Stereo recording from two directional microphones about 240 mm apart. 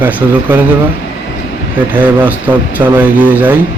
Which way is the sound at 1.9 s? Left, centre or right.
Centre.